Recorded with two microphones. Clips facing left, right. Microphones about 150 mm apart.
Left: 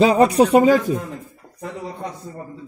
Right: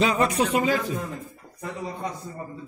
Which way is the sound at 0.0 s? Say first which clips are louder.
Left 8 dB; 35° left (ahead or behind).